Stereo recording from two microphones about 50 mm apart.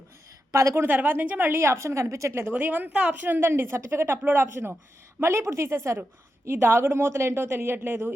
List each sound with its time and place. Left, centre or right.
0.9 s a woman's voice: right
1.6 s speech: right
2.5 s a woman's voice: right
5.2 s speech: right
6.4 s speech: right